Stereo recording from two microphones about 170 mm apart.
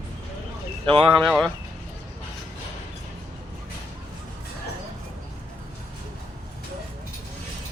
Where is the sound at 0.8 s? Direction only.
30° right (ahead or behind).